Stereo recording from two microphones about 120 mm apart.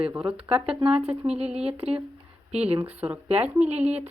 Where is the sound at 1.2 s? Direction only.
60° right (ahead or behind).